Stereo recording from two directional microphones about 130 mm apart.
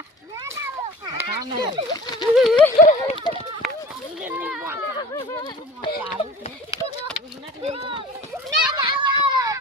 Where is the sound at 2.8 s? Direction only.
65° left (ahead or behind).